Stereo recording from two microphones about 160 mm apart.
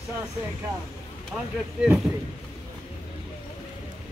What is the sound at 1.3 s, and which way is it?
Speech, 5° right (ahead or behind).